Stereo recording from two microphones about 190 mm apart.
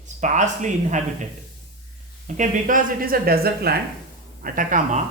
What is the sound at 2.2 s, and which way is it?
Speech, 40° right (ahead or behind).